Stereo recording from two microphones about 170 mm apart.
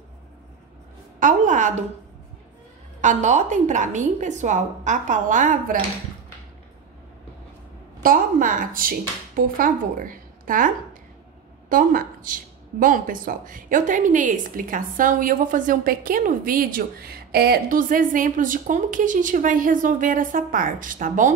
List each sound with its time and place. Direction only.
1.2 s speech: 45° right (ahead or behind)
3.0 s speech: 45° right (ahead or behind)
8.0 s speech: 55° right (ahead or behind)
11.7 s speech: 55° right (ahead or behind)